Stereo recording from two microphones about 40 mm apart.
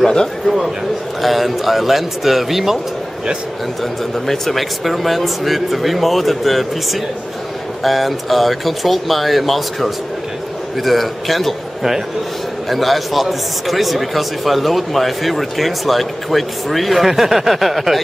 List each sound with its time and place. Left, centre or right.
0.0 s speech: centre
1.2 s a man's voice: centre
4.3 s a man's voice: centre